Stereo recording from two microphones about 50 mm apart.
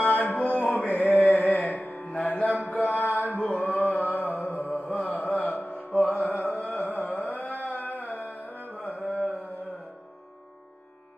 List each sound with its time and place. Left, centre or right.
0.0 s a sound: left
0.9 s music: left
2.7 s mantra: left
3.3 s chant: left
6.1 s music: left
6.6 s carnatic music: left